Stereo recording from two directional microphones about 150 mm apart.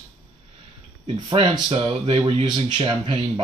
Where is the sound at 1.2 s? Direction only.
30° right (ahead or behind).